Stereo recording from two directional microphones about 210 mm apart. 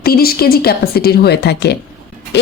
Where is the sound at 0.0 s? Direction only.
45° left (ahead or behind).